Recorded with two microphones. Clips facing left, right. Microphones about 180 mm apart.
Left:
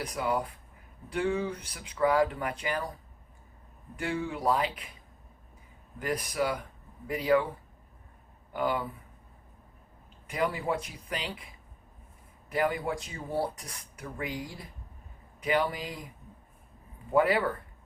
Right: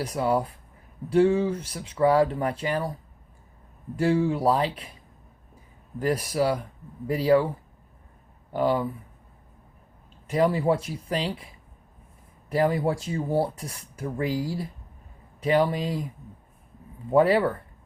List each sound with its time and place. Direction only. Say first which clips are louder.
0.0 s speech: right 6 dB; 30° right (ahead or behind)
3.9 s speech: right 10 dB; 30° right (ahead or behind)
6.0 s speech: right 6 dB; 30° right (ahead or behind)
8.5 s speech: right 6 dB; 30° right (ahead or behind)
10.2 s speech: right 8 dB; 30° right (ahead or behind)
12.5 s speech: right 6 dB; 30° right (ahead or behind)
17.2 s speech: right 5 dB; 30° right (ahead or behind)